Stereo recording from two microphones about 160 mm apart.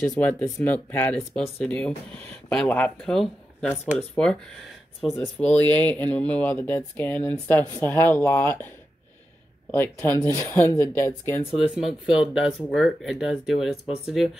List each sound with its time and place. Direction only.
0.0 s speech: 10° left (ahead or behind)
9.7 s speech: 10° left (ahead or behind)
11.8 s speech: 5° right (ahead or behind)